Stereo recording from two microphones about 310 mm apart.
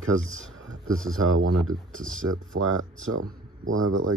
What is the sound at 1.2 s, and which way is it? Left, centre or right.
Speech, right.